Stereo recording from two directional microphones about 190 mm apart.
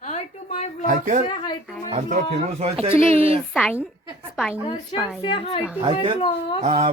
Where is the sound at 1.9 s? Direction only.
40° right (ahead or behind).